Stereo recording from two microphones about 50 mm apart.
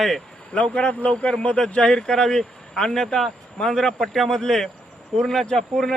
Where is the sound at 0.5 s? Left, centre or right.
Left.